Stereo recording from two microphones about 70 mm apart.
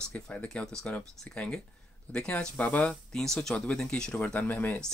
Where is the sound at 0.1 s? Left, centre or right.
Centre.